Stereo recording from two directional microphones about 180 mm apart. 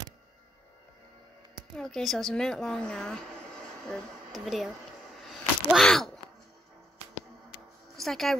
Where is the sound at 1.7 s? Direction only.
Centre (ahead or behind).